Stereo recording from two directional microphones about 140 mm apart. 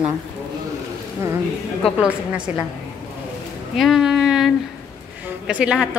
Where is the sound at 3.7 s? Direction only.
Centre (ahead or behind).